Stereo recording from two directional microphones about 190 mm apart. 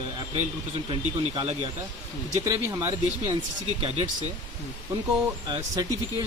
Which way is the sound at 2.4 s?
15° right (ahead or behind).